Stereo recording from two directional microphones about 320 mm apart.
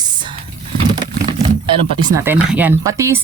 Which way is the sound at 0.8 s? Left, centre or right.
Centre.